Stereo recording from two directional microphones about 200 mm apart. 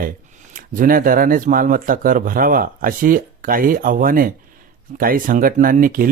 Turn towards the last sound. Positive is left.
turn(degrees=-45)  # may be behind; listen again after turning